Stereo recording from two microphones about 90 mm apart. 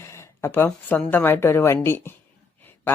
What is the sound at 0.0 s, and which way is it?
Speech, 30° left (ahead or behind).